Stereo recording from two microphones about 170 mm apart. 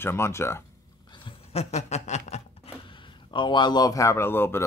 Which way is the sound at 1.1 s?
30° left (ahead or behind).